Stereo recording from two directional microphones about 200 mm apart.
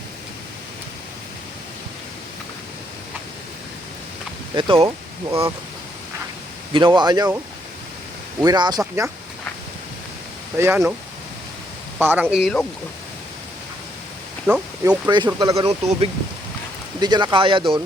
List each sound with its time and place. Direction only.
4.5 s speech: 25° right (ahead or behind)
5.3 s speech: 15° right (ahead or behind)
6.7 s speech: 25° right (ahead or behind)
8.4 s speech: 20° right (ahead or behind)
10.6 s speech: 10° right (ahead or behind)
11.9 s speech: 10° right (ahead or behind)
14.4 s speech: 5° right (ahead or behind)
15.3 s speech: 15° right (ahead or behind)
15.5 s speech: 30° right (ahead or behind)